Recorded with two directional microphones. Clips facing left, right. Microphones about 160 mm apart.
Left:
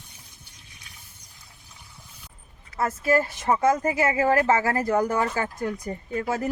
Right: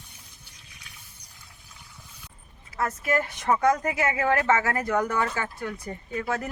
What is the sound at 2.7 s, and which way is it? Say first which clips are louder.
Speech: left 4 dB; 30° left (ahead or behind).